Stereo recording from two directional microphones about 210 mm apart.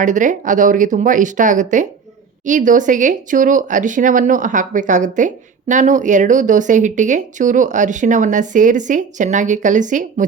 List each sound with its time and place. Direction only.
0.0 s speech: 35° right (ahead or behind)